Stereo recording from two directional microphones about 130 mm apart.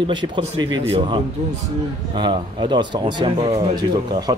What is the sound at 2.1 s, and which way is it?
A man's voice, 35° right (ahead or behind).